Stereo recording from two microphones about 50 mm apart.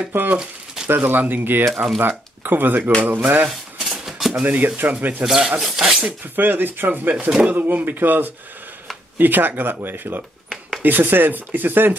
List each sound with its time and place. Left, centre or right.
0.1 s speech: right
3.4 s cutlery: centre
4.3 s speech: right
5.2 s speech: centre
5.6 s rub: centre
6.3 s speech: right